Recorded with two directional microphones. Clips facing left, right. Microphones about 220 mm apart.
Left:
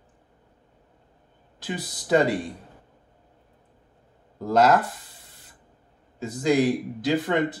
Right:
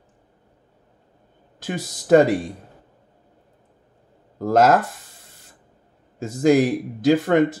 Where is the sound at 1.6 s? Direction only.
45° right (ahead or behind).